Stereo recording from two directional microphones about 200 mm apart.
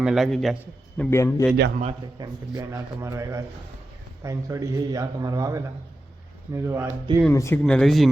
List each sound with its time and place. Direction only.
0.0 s a man's voice: centre (ahead or behind); by 1.5 s 15° left (ahead or behind)
1.8 s a man's voice: 25° right (ahead or behind)
7.3 s a man's voice: 10° left (ahead or behind)